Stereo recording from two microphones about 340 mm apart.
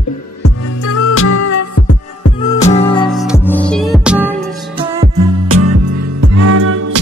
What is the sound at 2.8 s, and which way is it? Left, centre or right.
Music, centre.